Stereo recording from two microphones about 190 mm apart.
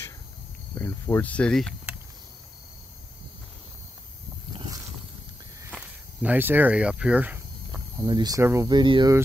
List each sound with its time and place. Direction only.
0.7 s speech: 15° left (ahead or behind)
4.6 s boat: 20° right (ahead or behind)
5.7 s speech: 5° right (ahead or behind); by 9.1 s 25° right (ahead or behind)